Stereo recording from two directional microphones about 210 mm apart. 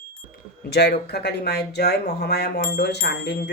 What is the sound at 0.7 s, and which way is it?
Speech, 50° left (ahead or behind).